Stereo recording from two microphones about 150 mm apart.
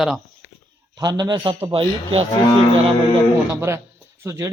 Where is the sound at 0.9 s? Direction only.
25° right (ahead or behind).